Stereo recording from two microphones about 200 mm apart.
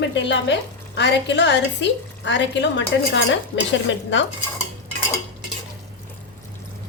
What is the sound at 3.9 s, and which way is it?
Dishes, 65° left (ahead or behind).